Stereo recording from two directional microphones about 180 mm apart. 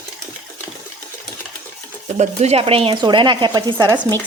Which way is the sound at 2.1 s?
35° right (ahead or behind).